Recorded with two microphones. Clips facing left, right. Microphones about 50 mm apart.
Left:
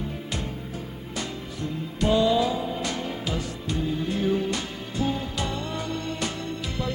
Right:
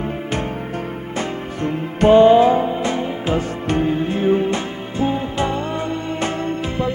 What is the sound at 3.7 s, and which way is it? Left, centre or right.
Music, right.